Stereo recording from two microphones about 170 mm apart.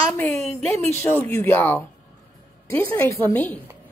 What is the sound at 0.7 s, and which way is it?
Speech, 15° left (ahead or behind).